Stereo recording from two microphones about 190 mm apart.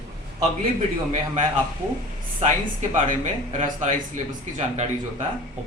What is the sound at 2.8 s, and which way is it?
Speech, 40° right (ahead or behind).